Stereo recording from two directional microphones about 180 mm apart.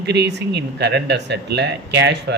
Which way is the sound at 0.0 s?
70° right (ahead or behind).